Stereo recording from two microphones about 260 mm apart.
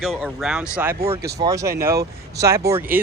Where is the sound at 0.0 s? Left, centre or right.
Centre.